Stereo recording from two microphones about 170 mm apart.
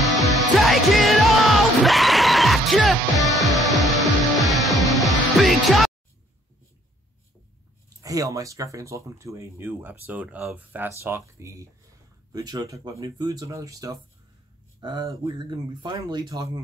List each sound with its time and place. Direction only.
0.0 s music: centre (ahead or behind)
8.0 s speech: 20° right (ahead or behind)